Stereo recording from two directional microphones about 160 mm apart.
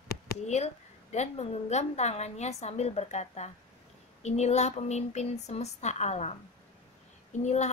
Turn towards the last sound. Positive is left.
turn(degrees=45)  # may be behind; listen again after turning